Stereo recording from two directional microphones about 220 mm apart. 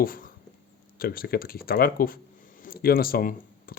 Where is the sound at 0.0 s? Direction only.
40° left (ahead or behind).